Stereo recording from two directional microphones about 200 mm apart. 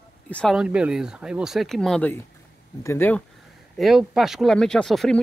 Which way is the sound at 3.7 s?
Centre (ahead or behind).